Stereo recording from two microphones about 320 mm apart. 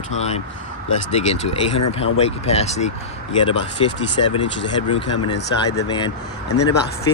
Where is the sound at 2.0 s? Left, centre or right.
Centre.